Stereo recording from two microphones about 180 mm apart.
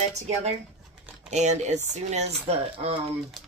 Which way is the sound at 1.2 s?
40° right (ahead or behind).